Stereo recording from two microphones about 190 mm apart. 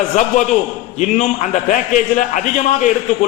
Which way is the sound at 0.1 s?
40° left (ahead or behind).